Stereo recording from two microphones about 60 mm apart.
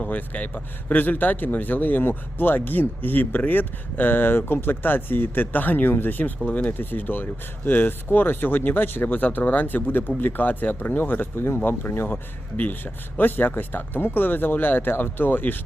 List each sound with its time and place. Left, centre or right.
0.0 s a man's voice: left